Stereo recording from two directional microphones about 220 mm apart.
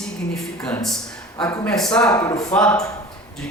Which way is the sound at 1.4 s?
15° left (ahead or behind).